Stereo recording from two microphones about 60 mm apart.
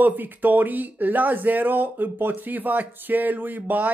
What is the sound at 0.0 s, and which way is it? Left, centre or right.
Speech, right.